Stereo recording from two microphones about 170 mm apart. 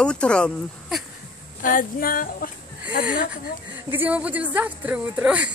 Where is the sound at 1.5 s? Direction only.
55° left (ahead or behind).